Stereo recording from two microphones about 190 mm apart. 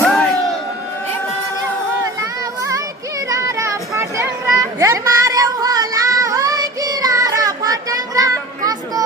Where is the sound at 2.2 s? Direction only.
15° right (ahead or behind).